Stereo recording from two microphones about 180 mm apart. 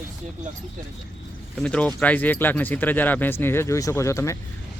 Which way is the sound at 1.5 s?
5° left (ahead or behind).